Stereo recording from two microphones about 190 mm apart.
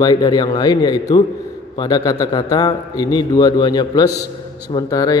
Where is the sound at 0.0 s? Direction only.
20° left (ahead or behind).